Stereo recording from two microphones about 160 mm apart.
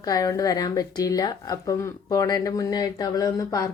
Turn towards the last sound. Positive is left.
turn(degrees=25)  # may be behind; listen again after turning